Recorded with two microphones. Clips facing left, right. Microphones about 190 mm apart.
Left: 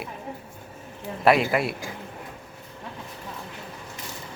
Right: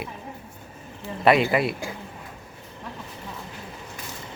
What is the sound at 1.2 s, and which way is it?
Speech, centre (ahead or behind).